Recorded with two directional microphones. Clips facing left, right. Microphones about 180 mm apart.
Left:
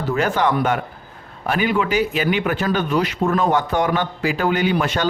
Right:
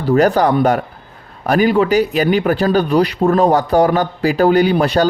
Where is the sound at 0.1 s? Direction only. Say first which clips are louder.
Right 7 dB; 40° right (ahead or behind).